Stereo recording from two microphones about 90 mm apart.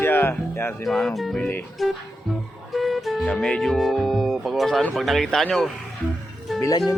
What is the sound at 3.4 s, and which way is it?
Speech, 5° left (ahead or behind).